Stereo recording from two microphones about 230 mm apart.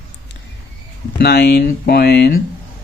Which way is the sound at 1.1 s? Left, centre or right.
Left.